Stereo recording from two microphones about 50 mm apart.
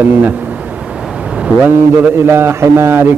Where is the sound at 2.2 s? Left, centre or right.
Right.